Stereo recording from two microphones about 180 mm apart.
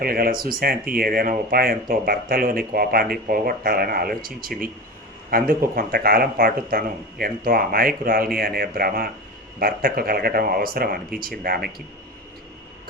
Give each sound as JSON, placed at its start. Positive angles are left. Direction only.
{"t": 0.0, "sound": "speech", "side_deg": -55}